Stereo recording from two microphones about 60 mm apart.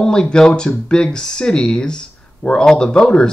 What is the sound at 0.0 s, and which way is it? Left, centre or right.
Speech, centre.